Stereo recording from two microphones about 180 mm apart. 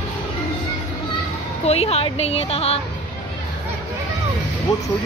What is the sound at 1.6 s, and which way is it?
A woman's voice, 35° left (ahead or behind).